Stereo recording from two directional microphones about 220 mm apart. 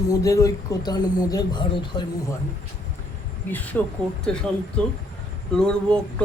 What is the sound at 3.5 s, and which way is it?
Speech, 5° left (ahead or behind).